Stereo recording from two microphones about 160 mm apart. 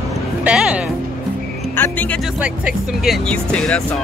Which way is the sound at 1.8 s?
10° left (ahead or behind).